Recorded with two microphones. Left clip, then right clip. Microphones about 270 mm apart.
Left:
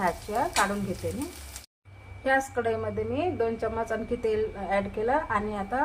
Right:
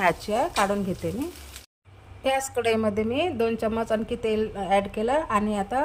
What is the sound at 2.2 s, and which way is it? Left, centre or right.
A woman's voice, right.